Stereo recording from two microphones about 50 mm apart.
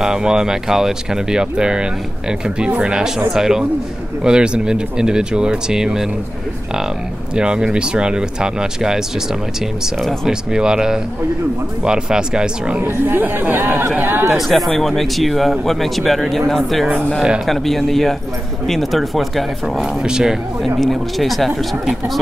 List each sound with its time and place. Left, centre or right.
0.0 s speech: centre
7.3 s speech: centre
10.2 s speech: centre
12.8 s speech: right
14.3 s speech: centre
20.0 s speech: centre
20.6 s speech: centre